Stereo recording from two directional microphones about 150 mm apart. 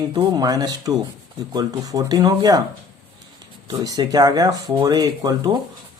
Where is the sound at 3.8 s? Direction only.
25° right (ahead or behind).